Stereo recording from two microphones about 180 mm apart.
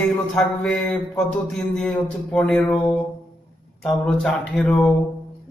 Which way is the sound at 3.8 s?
5° left (ahead or behind).